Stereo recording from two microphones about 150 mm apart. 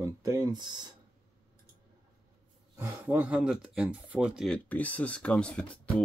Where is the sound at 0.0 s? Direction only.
20° right (ahead or behind).